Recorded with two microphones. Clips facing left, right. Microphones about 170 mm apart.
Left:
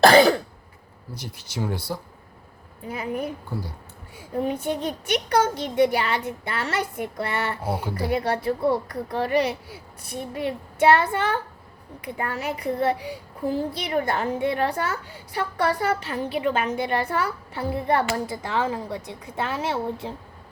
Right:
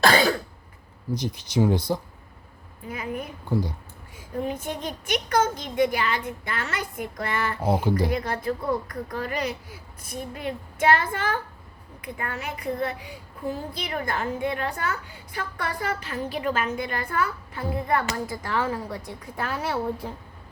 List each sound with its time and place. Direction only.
0.0 s throat clearing: 45° left (ahead or behind)
1.1 s speech: 20° right (ahead or behind)
2.9 s a woman's voice: 30° left (ahead or behind)
3.5 s speech: 20° right (ahead or behind)
4.8 s a woman's voice: 30° left (ahead or behind)
7.6 s speech: 20° right (ahead or behind)
8.1 s a woman's voice: 30° left (ahead or behind)